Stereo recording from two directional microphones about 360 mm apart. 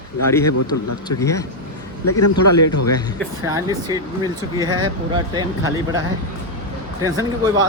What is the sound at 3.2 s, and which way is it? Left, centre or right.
Speech, centre.